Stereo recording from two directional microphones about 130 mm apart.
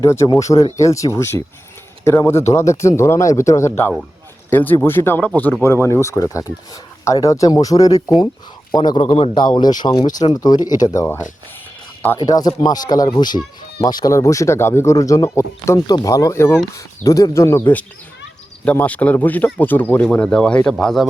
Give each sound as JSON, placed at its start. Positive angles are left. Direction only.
{"t": 0.0, "sound": "a man's voice", "side_deg": 20}
{"t": 9.0, "sound": "speech", "side_deg": 45}
{"t": 12.2, "sound": "speech", "side_deg": 30}